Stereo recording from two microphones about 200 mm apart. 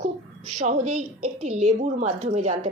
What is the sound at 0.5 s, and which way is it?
A woman's voice, 35° right (ahead or behind).